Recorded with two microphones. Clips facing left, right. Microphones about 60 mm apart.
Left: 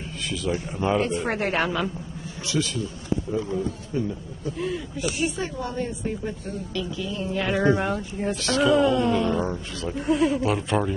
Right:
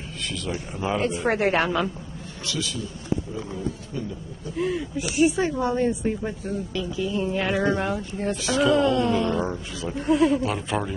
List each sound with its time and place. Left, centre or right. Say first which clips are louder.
0.3 s speech: left 4 dB; centre
4.6 s speech: right 4 dB; centre
6.4 s speech: right 2 dB; centre